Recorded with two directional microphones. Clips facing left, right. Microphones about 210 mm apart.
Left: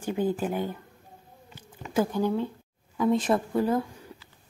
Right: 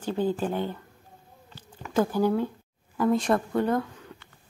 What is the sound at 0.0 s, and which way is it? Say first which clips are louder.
Speech: even; 10° left (ahead or behind).